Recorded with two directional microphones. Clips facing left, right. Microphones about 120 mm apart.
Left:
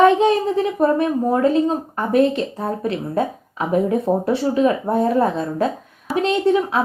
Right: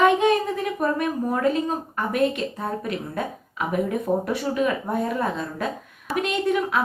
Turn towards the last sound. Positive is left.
turn(degrees=30)  # may be behind; listen again after turning